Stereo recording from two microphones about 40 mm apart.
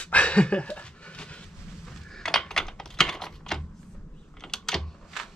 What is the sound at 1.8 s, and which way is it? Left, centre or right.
Computer keyboard, centre.